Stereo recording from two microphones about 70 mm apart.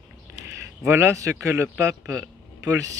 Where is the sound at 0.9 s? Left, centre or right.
Right.